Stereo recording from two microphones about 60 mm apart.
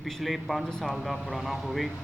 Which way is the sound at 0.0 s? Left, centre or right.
Centre.